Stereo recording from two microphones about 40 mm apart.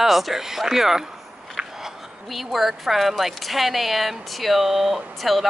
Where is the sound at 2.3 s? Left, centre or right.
Centre.